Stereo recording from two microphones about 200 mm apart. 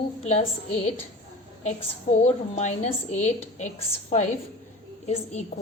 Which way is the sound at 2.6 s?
35° left (ahead or behind).